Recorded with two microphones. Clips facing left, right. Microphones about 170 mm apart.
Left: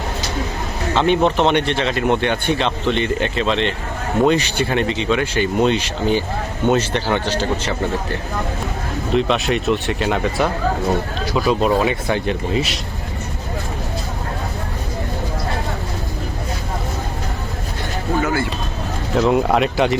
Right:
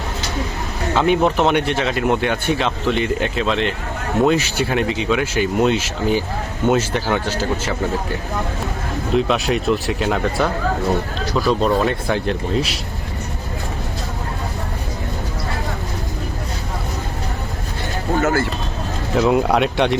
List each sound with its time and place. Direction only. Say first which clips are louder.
0.9 s speech: even; 5° right (ahead or behind)
9.1 s speech: even; centre (ahead or behind)
18.2 s speech: right 2 dB; 45° right (ahead or behind)
19.1 s speech: even; centre (ahead or behind)